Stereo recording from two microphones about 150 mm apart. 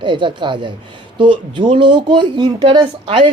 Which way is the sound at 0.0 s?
30° right (ahead or behind).